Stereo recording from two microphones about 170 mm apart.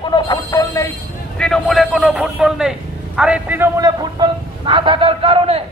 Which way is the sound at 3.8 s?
25° right (ahead or behind).